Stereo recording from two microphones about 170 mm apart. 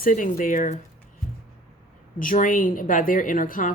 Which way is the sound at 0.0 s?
50° left (ahead or behind).